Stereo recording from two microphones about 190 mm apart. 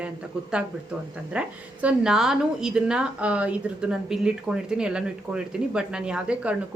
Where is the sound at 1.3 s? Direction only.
5° right (ahead or behind).